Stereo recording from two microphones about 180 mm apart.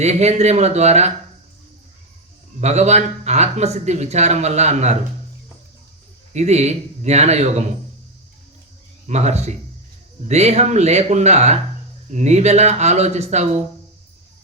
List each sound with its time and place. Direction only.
0.0 s speech: 40° right (ahead or behind)
2.6 s speech: 40° right (ahead or behind)
6.3 s speech: 40° right (ahead or behind)
9.0 s speech: 40° right (ahead or behind)